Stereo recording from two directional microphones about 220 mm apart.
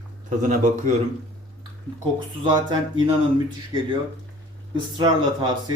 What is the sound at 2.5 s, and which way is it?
Speech, 20° right (ahead or behind).